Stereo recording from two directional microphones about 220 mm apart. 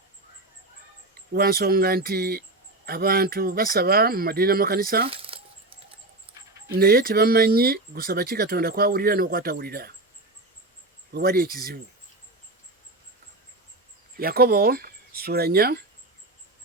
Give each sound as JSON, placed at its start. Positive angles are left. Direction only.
{"t": 1.3, "sound": "speech", "side_deg": -45}
{"t": 5.0, "sound": "a sound", "side_deg": -25}
{"t": 6.7, "sound": "speech", "side_deg": -45}
{"t": 11.1, "sound": "speech", "side_deg": -45}
{"t": 14.2, "sound": "speech", "side_deg": -45}